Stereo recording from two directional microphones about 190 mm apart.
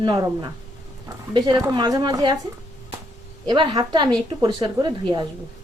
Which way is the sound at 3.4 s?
25° right (ahead or behind).